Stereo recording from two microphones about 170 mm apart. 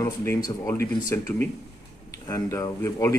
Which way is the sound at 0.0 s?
15° left (ahead or behind).